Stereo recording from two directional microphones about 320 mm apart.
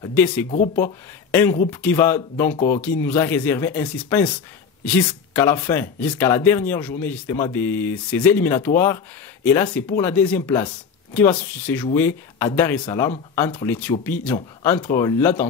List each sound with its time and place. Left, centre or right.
0.0 s speech: centre